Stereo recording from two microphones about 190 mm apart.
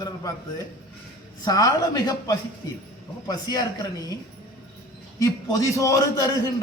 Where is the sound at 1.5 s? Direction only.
20° left (ahead or behind).